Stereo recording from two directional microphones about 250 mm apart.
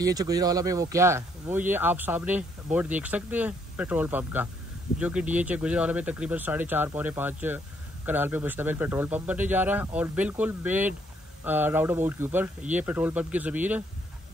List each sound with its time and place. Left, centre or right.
0.0 s speech: centre